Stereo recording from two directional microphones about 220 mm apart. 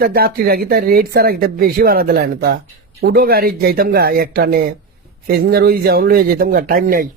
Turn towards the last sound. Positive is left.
turn(degrees=-40)  # may be behind; listen again after turning